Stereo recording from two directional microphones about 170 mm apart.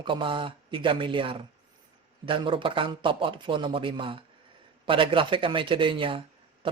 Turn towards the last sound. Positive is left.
turn(degrees=-30)  # may be behind; listen again after turning